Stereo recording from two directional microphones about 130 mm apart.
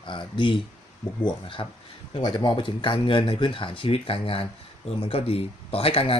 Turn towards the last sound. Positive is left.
turn(degrees=45)  # may be behind; listen again after turning